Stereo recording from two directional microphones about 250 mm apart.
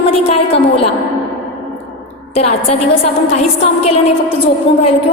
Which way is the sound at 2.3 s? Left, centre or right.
Left.